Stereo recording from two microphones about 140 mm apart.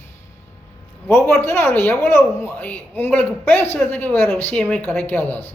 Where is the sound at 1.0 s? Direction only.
15° left (ahead or behind).